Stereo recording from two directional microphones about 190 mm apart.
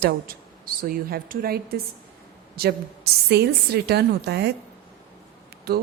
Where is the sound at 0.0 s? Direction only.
50° right (ahead or behind).